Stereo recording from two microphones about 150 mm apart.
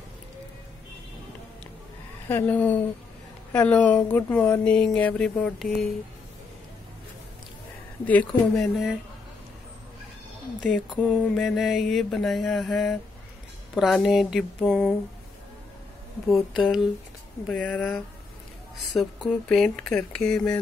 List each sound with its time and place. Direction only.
2.2 s speech: 15° left (ahead or behind)
8.0 s speech: 10° left (ahead or behind)
10.6 s mantra: centre (ahead or behind)
16.5 s mantra: 5° right (ahead or behind)